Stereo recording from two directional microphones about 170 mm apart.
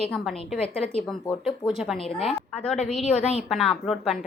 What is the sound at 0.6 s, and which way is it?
Speech, 35° left (ahead or behind).